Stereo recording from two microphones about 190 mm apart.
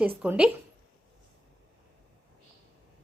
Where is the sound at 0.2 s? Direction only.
5° right (ahead or behind).